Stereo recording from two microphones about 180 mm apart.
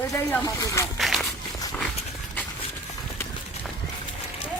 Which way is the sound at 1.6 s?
10° left (ahead or behind).